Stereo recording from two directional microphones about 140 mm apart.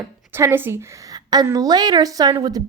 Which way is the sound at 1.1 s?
30° right (ahead or behind).